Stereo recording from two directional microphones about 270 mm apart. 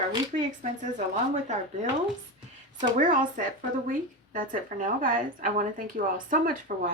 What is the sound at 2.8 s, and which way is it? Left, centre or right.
A woman's voice, right.